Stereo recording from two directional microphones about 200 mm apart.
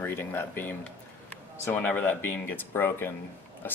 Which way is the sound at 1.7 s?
10° left (ahead or behind).